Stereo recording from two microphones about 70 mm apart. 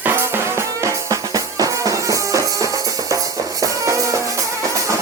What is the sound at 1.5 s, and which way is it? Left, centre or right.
Music, right.